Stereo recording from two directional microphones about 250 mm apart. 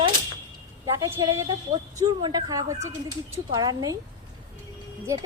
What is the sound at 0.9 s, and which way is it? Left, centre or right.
A woman's voice, centre.